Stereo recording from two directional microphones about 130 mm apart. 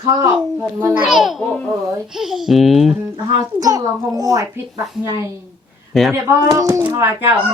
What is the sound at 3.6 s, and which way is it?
Speech, 30° right (ahead or behind).